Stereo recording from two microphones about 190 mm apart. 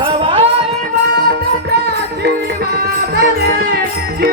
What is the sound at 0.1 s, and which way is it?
Music, 30° right (ahead or behind).